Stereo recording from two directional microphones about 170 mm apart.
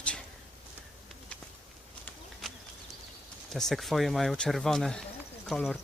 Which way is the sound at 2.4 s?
Centre (ahead or behind).